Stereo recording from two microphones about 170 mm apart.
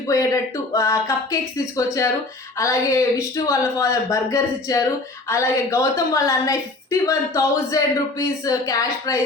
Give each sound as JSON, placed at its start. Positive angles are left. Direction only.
{"t": 0.1, "sound": "a woman's voice", "side_deg": 20}